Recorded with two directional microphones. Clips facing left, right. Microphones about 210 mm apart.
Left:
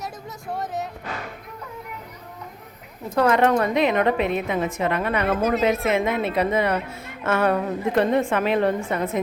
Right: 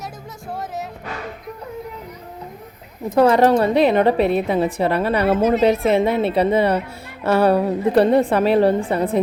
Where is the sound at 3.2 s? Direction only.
35° right (ahead or behind).